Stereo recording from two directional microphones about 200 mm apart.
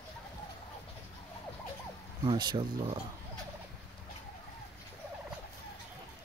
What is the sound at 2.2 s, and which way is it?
Speech, 20° right (ahead or behind).